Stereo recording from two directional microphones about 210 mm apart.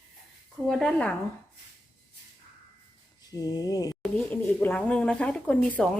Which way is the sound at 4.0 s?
5° left (ahead or behind).